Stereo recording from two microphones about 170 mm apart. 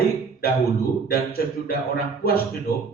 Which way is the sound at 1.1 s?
60° left (ahead or behind).